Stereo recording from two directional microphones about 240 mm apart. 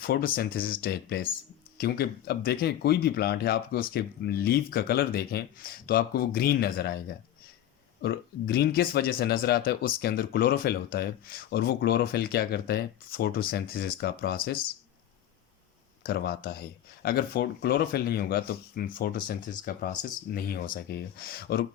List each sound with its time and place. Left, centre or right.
0.0 s speech: left
8.0 s speech: left
16.0 s speech: left